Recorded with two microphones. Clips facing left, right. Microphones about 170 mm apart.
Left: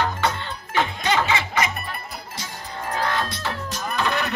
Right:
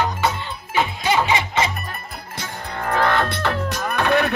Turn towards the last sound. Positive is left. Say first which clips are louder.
# right 6 dB
turn(degrees=-55)  # may be behind; listen again after turning